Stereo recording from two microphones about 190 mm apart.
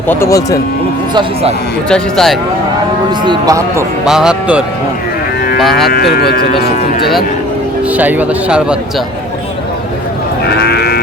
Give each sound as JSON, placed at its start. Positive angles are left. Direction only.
{"t": 0.1, "sound": "speech", "side_deg": 15}
{"t": 1.1, "sound": "speech", "side_deg": -30}
{"t": 1.9, "sound": "speech", "side_deg": 0}
{"t": 3.2, "sound": "speech", "side_deg": -15}
{"t": 4.0, "sound": "speech", "side_deg": -5}
{"t": 5.7, "sound": "speech", "side_deg": 55}
{"t": 7.9, "sound": "speech", "side_deg": -10}
{"t": 10.4, "sound": "sheep", "side_deg": 60}